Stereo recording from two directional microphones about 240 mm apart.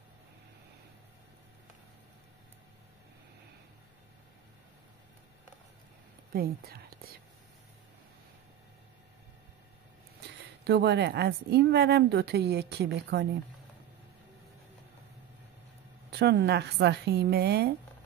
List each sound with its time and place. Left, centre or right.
6.3 s speech: right
10.6 s speech: right
16.1 s speech: right